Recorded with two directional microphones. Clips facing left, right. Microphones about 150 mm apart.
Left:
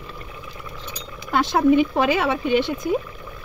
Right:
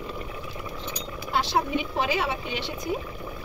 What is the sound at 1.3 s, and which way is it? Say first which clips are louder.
Speech: left 8 dB; 50° left (ahead or behind).